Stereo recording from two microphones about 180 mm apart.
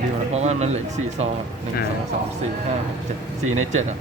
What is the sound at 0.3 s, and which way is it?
Speech, 40° right (ahead or behind).